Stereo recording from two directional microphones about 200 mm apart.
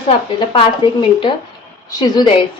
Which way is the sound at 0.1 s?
25° left (ahead or behind).